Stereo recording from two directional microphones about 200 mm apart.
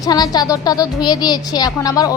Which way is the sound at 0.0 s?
20° left (ahead or behind).